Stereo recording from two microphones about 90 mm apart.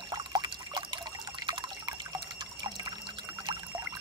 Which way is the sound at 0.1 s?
50° right (ahead or behind).